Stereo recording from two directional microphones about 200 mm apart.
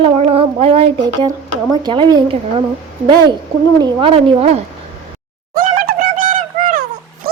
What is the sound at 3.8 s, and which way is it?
Speech, 25° right (ahead or behind).